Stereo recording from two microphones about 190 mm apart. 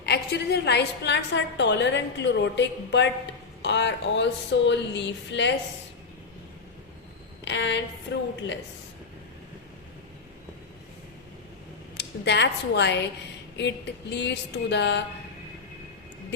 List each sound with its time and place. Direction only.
0.0 s a woman's voice: 60° left (ahead or behind)
7.4 s a woman's voice: 70° left (ahead or behind)
11.9 s speech: 65° left (ahead or behind)
13.6 s a sound: 65° left (ahead or behind)